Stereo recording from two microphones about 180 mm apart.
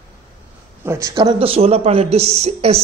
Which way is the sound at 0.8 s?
20° right (ahead or behind).